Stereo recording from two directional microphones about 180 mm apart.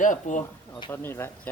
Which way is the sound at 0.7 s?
25° left (ahead or behind).